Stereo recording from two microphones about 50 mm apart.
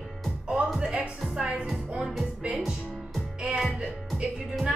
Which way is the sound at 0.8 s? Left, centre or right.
Centre.